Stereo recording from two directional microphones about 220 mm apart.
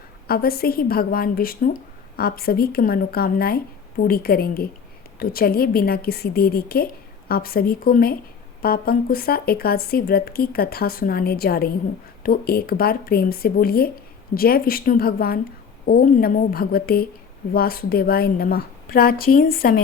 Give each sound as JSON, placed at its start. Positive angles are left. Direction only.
{"t": 0.3, "sound": "a woman's voice", "side_deg": 45}